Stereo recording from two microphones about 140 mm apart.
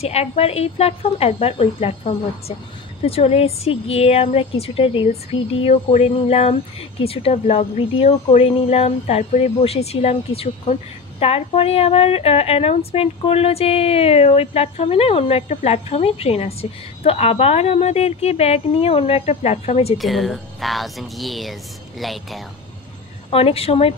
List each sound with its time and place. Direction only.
0.0 s a woman's voice: 50° left (ahead or behind)
20.0 s speech: centre (ahead or behind)
23.3 s a woman's voice: 45° left (ahead or behind)